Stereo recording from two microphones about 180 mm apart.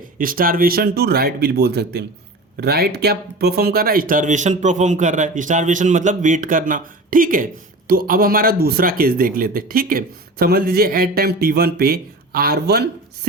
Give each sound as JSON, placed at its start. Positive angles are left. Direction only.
{"t": 0.2, "sound": "speech", "side_deg": -50}